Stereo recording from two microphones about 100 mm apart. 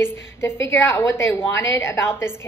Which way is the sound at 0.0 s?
25° left (ahead or behind).